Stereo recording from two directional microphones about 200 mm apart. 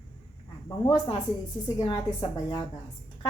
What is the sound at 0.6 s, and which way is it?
A woman's voice, 20° left (ahead or behind).